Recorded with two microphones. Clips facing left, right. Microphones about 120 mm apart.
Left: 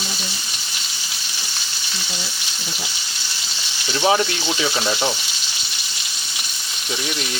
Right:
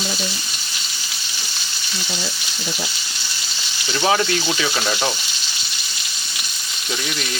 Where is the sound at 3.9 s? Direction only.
15° left (ahead or behind).